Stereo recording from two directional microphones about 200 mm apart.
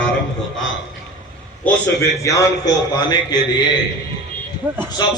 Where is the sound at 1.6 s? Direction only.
10° left (ahead or behind).